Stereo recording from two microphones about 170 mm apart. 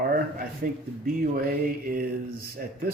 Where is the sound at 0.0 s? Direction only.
55° right (ahead or behind).